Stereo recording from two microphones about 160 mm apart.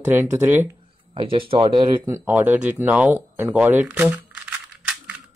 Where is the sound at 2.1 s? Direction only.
10° right (ahead or behind).